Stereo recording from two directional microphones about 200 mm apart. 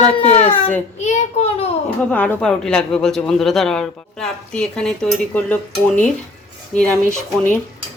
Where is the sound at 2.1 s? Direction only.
5° left (ahead or behind).